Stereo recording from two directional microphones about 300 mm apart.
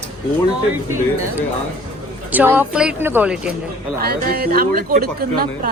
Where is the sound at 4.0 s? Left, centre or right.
Right.